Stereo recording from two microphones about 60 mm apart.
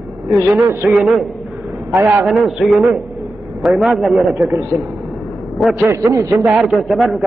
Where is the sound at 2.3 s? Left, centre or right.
Centre.